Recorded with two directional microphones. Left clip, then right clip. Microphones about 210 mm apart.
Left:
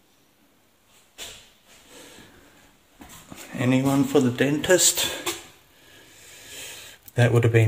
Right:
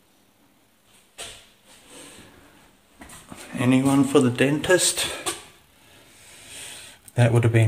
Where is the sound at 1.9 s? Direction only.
Centre (ahead or behind).